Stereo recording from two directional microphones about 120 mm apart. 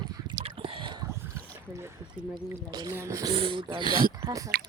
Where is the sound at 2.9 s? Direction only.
25° right (ahead or behind).